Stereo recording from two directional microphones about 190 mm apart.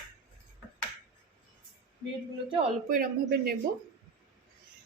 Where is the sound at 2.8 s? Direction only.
50° right (ahead or behind).